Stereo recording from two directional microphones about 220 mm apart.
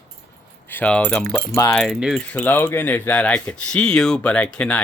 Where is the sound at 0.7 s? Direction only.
5° left (ahead or behind).